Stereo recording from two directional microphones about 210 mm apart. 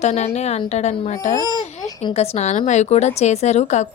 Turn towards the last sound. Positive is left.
turn(degrees=35)  # may be behind; listen again after turning